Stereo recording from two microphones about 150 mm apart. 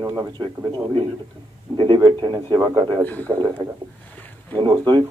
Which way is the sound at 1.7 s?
30° right (ahead or behind).